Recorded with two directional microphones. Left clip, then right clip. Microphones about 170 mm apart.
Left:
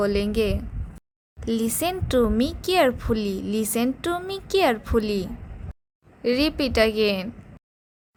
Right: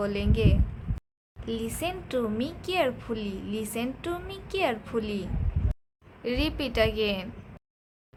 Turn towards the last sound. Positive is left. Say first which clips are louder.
# left 5 dB
turn(degrees=35)  # may be behind; listen again after turning